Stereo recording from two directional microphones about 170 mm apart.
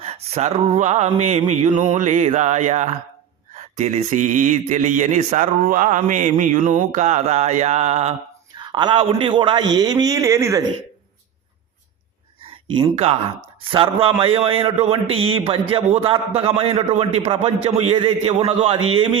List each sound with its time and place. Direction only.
0.0 s a man's voice: 35° right (ahead or behind)
8.5 s a man's voice: 25° right (ahead or behind)
12.5 s a man's voice: 30° right (ahead or behind)